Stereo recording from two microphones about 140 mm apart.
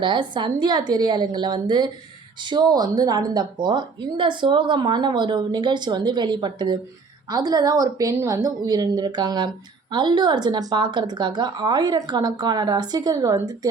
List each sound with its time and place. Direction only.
0.0 s a woman's voice: 35° right (ahead or behind)